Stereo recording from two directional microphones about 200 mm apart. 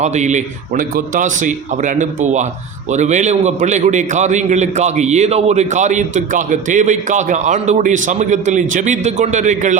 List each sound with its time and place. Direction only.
0.0 s a man's voice: 35° right (ahead or behind)